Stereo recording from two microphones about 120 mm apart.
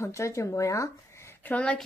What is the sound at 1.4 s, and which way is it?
Speech, 10° left (ahead or behind).